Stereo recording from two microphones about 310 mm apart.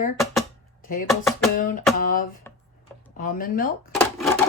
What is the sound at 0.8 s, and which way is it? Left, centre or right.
Speech, left.